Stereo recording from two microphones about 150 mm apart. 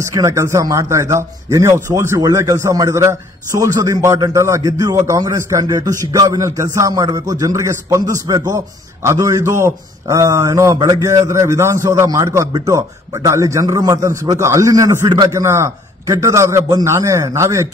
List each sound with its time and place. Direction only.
0.1 s a man's voice: 20° right (ahead or behind)